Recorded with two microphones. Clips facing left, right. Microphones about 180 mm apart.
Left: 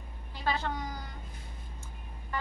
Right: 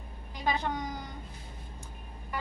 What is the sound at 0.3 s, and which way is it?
Speech, 15° right (ahead or behind).